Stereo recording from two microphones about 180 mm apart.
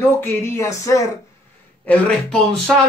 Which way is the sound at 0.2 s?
15° left (ahead or behind).